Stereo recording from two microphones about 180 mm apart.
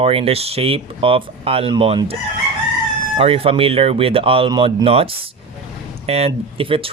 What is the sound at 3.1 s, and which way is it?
Speech, 30° right (ahead or behind).